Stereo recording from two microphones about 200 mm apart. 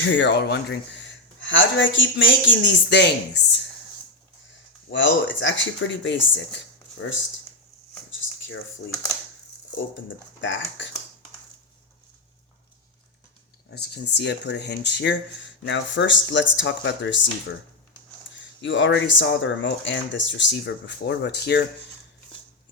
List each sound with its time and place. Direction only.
0.0 s speech: 65° left (ahead or behind)
4.9 s speech: 65° left (ahead or behind)
10.4 s speech: 70° left (ahead or behind)
13.7 s speech: 55° left (ahead or behind)
18.3 s speech: 65° left (ahead or behind)